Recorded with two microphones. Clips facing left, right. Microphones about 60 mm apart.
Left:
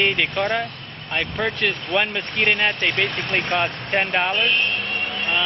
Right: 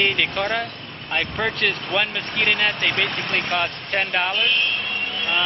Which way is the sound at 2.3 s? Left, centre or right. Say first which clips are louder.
Left 1 dB; centre.